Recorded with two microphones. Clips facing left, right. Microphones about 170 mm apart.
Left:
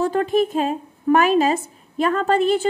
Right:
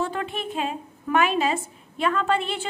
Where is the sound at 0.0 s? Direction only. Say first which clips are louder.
Left 10 dB; 40° left (ahead or behind).